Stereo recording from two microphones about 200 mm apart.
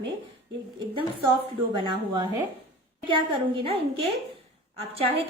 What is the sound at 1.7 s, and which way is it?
A woman's voice, 20° right (ahead or behind).